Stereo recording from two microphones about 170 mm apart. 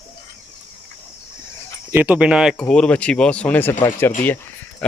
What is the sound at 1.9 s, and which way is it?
Speech, 10° right (ahead or behind).